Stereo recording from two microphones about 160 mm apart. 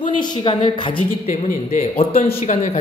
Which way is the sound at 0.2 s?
30° left (ahead or behind).